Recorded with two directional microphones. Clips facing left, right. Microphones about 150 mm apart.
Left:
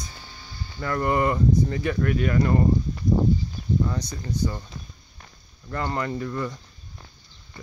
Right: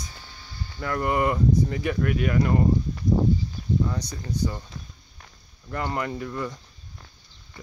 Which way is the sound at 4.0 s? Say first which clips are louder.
Left 1 dB; 15° right (ahead or behind).